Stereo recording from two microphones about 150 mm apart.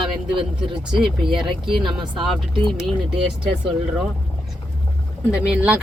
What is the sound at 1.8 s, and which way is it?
Speech, 30° right (ahead or behind).